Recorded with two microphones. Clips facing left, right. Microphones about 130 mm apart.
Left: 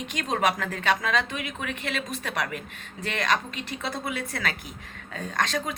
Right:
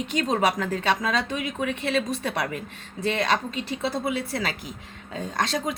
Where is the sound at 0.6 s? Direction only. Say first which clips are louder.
Right 2 dB; 30° right (ahead or behind).